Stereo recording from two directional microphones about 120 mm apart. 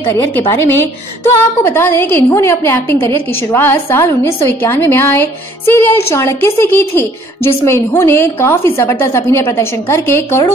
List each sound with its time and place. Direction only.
0.0 s a woman's voice: 20° left (ahead or behind)